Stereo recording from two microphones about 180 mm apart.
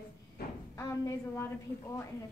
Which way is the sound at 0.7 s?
15° left (ahead or behind).